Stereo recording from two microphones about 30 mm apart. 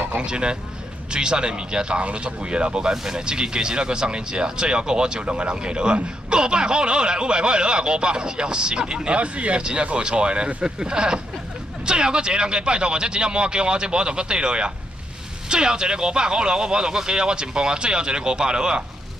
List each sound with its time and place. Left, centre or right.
0.2 s speech: right
2.9 s speech: right
5.2 s speech: right
9.6 s speech: right